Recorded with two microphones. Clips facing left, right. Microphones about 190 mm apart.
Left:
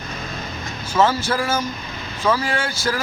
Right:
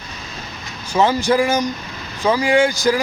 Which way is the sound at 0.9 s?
15° right (ahead or behind).